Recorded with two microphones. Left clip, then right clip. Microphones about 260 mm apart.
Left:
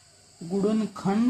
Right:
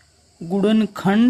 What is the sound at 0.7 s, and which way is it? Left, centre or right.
Speech, right.